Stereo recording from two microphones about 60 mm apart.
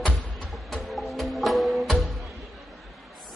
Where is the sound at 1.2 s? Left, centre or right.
Centre.